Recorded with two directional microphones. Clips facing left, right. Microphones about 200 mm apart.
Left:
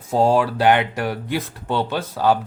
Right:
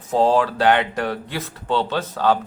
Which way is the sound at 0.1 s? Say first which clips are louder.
Even; 10° left (ahead or behind).